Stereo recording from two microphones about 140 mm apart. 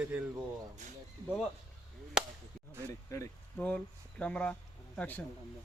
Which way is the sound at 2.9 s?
20° left (ahead or behind).